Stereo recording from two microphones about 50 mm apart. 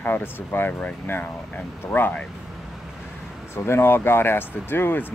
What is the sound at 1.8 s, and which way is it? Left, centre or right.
Speech, left.